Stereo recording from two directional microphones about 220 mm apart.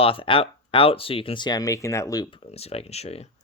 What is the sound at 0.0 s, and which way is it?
Speech, 25° left (ahead or behind).